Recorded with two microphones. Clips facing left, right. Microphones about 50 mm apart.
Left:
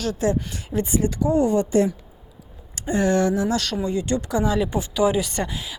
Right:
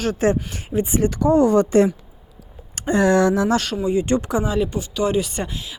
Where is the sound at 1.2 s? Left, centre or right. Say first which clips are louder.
Right 5 dB; right.